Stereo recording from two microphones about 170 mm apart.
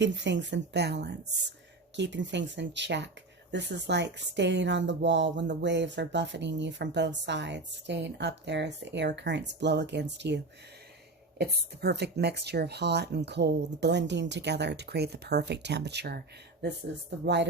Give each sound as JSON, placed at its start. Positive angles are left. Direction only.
{"t": 0.0, "sound": "speech", "side_deg": -90}
{"t": 2.0, "sound": "speech", "side_deg": -90}
{"t": 11.3, "sound": "speech", "side_deg": -75}
{"t": 17.2, "sound": "speech", "side_deg": -90}